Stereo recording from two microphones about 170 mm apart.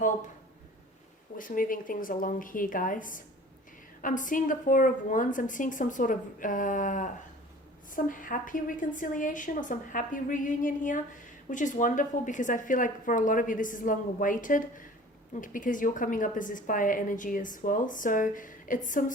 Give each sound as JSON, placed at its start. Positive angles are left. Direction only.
{"t": 1.4, "sound": "a woman's voice", "side_deg": 55}